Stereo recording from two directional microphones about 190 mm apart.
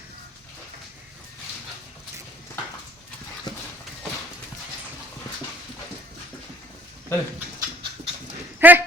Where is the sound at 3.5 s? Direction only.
20° left (ahead or behind).